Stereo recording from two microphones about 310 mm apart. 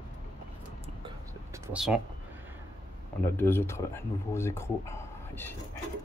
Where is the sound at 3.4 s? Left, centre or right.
Centre.